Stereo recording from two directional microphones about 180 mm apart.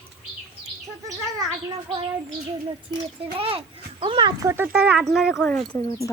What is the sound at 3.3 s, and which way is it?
Speech, 30° right (ahead or behind).